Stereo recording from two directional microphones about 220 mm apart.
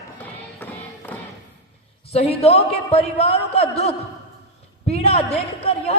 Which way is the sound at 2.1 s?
30° left (ahead or behind).